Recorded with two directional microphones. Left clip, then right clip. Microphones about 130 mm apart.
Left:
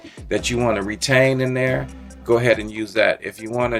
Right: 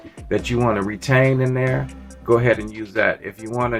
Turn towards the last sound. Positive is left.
turn(degrees=35)  # may be behind; listen again after turning